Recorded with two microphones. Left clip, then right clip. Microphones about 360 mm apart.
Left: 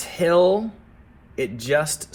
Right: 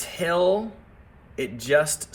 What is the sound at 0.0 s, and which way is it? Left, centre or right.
Speech, centre.